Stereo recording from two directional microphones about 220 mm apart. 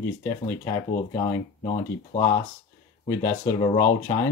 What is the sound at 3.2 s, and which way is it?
Speech, 15° left (ahead or behind).